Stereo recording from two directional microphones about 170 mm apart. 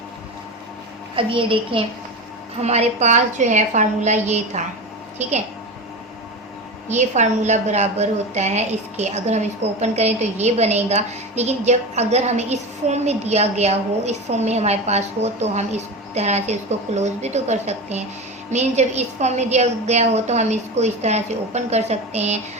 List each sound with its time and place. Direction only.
1.1 s a woman's voice: 30° right (ahead or behind)
6.9 s a woman's voice: 45° right (ahead or behind)